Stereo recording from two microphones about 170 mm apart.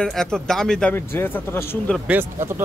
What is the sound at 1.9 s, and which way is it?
Speech, 10° right (ahead or behind).